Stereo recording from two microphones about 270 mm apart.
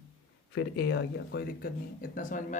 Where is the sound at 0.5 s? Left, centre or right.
Left.